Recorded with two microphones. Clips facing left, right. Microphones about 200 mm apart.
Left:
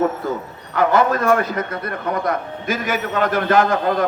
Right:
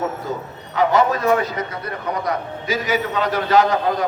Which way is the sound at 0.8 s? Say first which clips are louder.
Left 1 dB; 55° left (ahead or behind).